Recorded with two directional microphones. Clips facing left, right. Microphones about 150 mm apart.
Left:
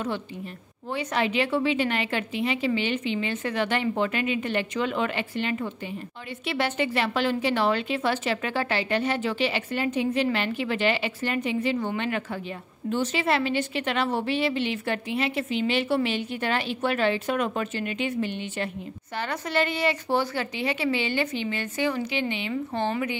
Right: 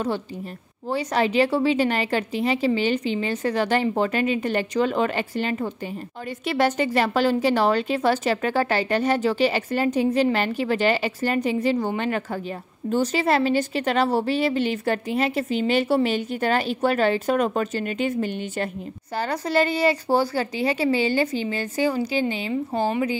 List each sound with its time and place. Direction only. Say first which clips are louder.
0.8 s a woman's voice: right 4 dB; 35° right (ahead or behind)